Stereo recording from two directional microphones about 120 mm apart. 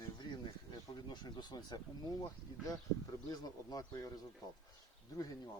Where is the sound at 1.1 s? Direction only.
35° left (ahead or behind).